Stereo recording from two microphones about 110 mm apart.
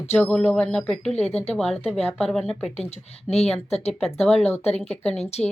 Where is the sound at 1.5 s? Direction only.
Centre (ahead or behind).